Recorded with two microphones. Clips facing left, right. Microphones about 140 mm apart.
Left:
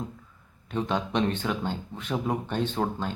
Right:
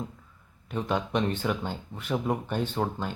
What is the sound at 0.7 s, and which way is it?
Speech, 5° right (ahead or behind).